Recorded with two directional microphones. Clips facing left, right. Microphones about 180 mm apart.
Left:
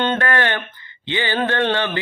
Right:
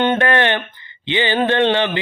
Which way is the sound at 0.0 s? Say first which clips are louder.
Right 4 dB; 20° right (ahead or behind).